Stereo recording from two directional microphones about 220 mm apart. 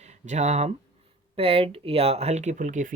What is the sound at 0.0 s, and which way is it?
Speech, 30° right (ahead or behind).